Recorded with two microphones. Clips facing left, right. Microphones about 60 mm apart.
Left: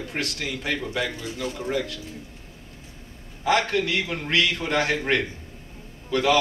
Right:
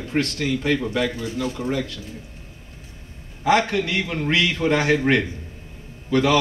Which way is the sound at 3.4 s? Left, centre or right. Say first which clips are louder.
Right 3 dB; centre.